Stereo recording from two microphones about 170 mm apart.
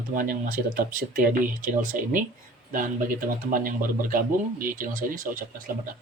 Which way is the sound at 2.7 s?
55° right (ahead or behind).